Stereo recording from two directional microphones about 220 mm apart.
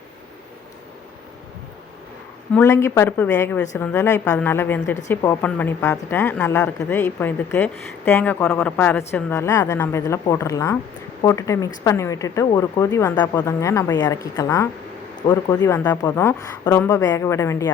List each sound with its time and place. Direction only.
2.6 s a woman's voice: 10° left (ahead or behind)